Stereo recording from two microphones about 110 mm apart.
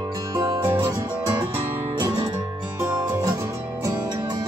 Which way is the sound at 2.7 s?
25° right (ahead or behind).